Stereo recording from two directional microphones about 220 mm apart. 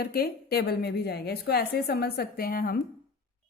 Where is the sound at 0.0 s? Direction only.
45° left (ahead or behind).